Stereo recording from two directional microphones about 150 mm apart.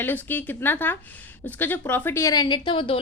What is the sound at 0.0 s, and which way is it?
A woman's voice, 15° left (ahead or behind).